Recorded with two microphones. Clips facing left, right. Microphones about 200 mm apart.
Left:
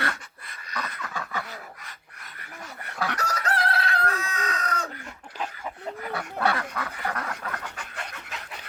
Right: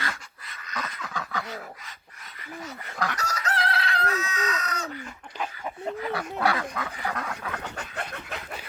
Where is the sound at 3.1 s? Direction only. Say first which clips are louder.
Left 5 dB; 55° left (ahead or behind).